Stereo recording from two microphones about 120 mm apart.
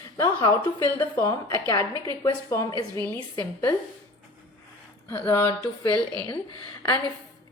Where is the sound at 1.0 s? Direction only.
25° left (ahead or behind).